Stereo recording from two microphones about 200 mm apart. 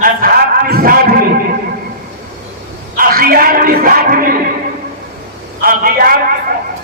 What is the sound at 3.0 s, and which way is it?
Speech, 45° right (ahead or behind).